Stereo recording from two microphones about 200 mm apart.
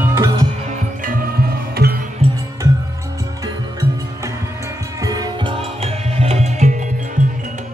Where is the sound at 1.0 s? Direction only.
45° right (ahead or behind).